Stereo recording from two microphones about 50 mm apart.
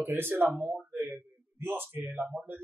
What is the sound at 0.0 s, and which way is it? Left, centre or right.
Speech, right.